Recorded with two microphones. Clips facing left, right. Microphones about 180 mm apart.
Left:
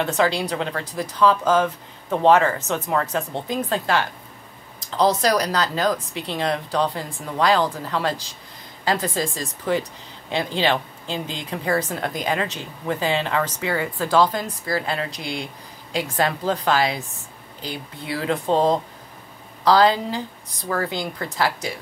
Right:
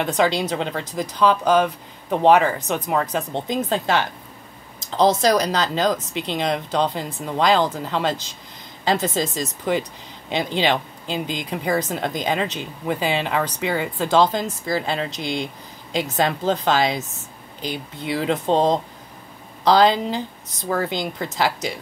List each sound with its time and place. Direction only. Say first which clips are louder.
0.0 s speech: right 1 dB; 20° right (ahead or behind)